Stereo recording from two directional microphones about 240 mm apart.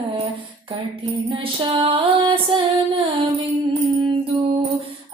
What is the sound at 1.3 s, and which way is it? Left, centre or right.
Music, right.